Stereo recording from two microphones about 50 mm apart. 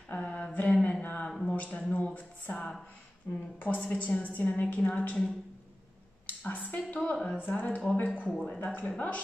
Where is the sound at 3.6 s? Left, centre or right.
Left.